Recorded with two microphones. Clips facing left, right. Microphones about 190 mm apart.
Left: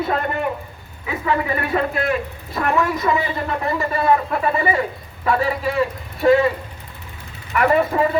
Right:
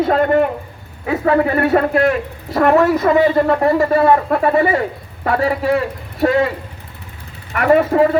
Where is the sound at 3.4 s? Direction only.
35° right (ahead or behind).